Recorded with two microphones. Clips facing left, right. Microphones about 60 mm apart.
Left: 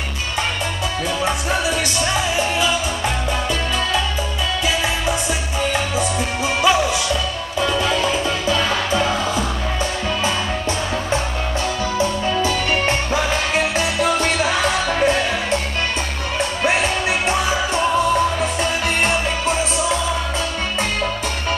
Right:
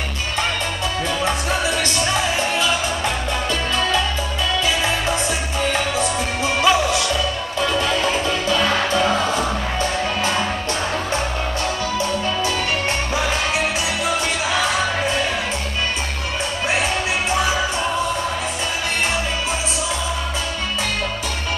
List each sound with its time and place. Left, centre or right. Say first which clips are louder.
1.2 s music: left 1 dB; centre
4.6 s music: left 2 dB; centre
12.0 s music: left 4 dB; left
13.7 s music: left 3 dB; left
16.7 s music: left 1 dB; centre